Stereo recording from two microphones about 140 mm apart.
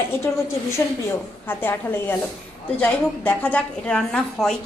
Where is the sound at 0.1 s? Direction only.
20° left (ahead or behind).